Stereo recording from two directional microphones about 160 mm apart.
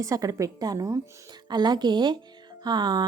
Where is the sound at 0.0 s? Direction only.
20° right (ahead or behind).